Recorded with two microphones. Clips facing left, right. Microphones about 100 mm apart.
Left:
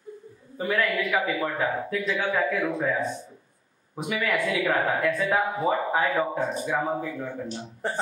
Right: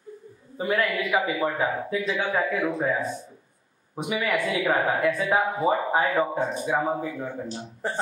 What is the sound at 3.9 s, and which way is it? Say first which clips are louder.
Speech: right 1 dB; 15° right (ahead or behind).